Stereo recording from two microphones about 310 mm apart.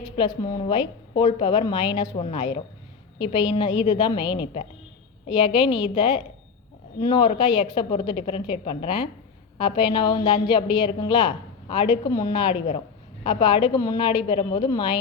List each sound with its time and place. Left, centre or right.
0.0 s a woman's voice: centre